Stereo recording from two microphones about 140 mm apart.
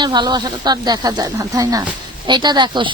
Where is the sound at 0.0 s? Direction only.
30° right (ahead or behind).